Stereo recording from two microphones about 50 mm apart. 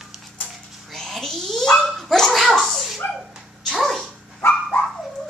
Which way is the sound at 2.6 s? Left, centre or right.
Centre.